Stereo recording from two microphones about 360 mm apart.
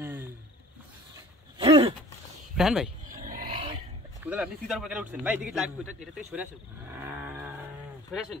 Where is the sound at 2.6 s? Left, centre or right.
Centre.